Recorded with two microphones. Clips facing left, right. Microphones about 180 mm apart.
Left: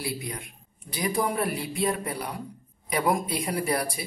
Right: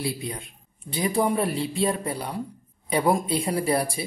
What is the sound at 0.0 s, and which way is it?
Speech, 25° right (ahead or behind).